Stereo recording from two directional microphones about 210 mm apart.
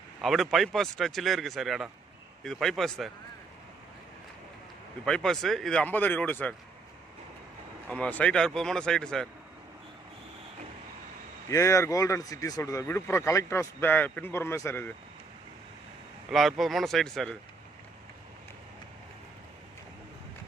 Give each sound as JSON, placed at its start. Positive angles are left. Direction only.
{"t": 0.2, "sound": "speech", "side_deg": 0}
{"t": 5.0, "sound": "speech", "side_deg": 0}
{"t": 7.9, "sound": "speech", "side_deg": 5}
{"t": 11.5, "sound": "speech", "side_deg": 15}
{"t": 16.3, "sound": "speech", "side_deg": 0}